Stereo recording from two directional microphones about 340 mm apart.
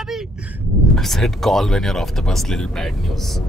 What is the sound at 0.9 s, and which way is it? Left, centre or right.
Speech, centre.